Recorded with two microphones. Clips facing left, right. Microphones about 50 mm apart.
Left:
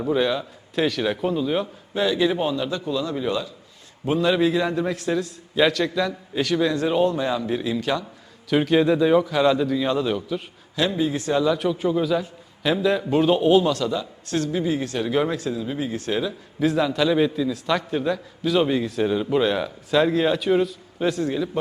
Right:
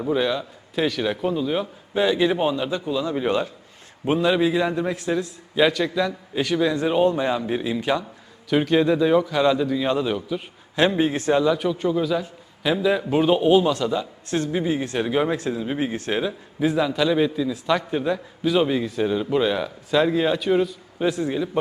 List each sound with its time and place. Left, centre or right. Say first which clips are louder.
0.0 s a man's voice: left 1 dB; centre
1.9 s speech: right 2 dB; centre
3.2 s a man's voice: right 3 dB; right
4.2 s a man's voice: even; centre
8.4 s a man's voice: even; centre
10.8 s a man's voice: right 3 dB; right
11.4 s a man's voice: even; centre
15.4 s speech: right 2 dB; right
16.6 s a man's voice: even; centre
21.2 s speech: right 1 dB; centre